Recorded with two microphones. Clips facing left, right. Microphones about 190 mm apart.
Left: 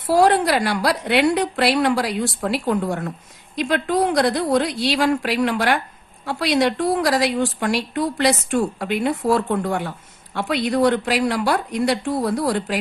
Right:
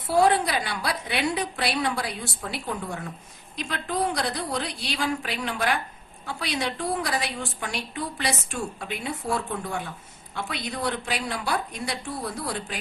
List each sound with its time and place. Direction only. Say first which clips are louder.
0.0 s a woman's voice: left 5 dB; 75° left (ahead or behind)